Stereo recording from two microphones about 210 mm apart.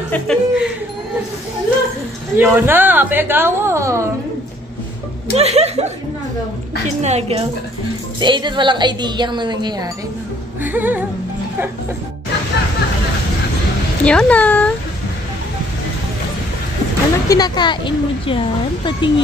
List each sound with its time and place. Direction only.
0.1 s speech: 5° left (ahead or behind)
2.3 s a woman's voice: 10° right (ahead or behind)
5.3 s speech: 30° right (ahead or behind)
7.0 s a woman's voice: 30° right (ahead or behind)
10.6 s a woman's voice: 10° right (ahead or behind)
14.0 s speech: 5° left (ahead or behind)
17.3 s speech: 20° left (ahead or behind)